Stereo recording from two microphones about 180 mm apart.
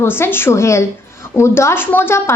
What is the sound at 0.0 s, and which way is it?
A woman's voice, 15° left (ahead or behind).